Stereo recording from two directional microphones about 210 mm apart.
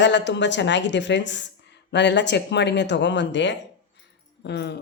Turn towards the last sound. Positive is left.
turn(degrees=55)  # may be behind; listen again after turning